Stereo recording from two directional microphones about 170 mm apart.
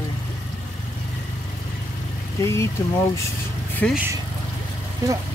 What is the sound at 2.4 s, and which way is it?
Speech, 15° left (ahead or behind).